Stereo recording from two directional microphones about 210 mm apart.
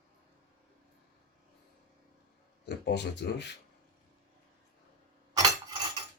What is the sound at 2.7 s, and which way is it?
Speech, 55° left (ahead or behind).